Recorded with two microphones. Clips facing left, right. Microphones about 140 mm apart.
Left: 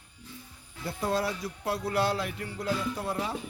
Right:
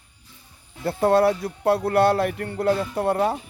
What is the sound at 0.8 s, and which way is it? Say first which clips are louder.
A man's voice: right 11 dB; 60° right (ahead or behind).